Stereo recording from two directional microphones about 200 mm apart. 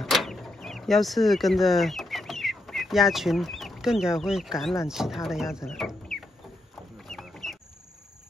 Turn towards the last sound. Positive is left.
turn(degrees=0)  # may be behind; listen again after turning